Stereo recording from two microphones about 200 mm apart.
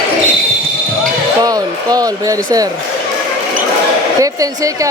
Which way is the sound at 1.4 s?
20° right (ahead or behind).